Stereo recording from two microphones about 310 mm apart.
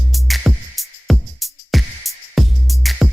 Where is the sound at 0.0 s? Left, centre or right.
Centre.